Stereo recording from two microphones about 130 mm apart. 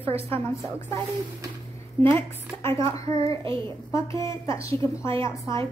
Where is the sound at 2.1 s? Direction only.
20° left (ahead or behind).